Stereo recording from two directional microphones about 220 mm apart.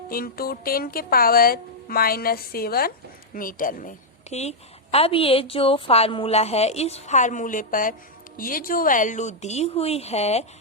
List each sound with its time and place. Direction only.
0.1 s a woman's voice: 40° left (ahead or behind)